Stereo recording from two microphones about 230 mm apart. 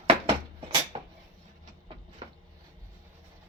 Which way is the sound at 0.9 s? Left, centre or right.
Right.